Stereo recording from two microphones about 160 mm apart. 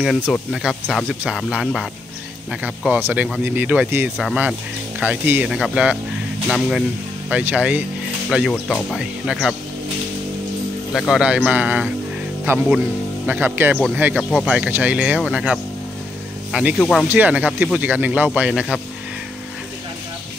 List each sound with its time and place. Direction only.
0.0 s speech: centre (ahead or behind)
10.9 s speech: centre (ahead or behind)
14.1 s speech: centre (ahead or behind)
17.1 s speech: 10° right (ahead or behind)